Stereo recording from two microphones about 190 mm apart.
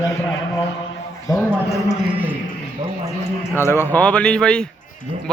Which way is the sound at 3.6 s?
10° left (ahead or behind).